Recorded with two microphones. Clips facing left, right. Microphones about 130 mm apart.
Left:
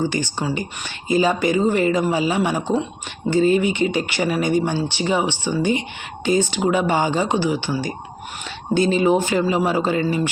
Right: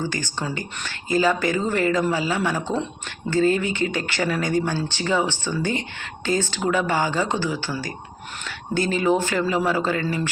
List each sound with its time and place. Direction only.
0.0 s speech: 20° left (ahead or behind)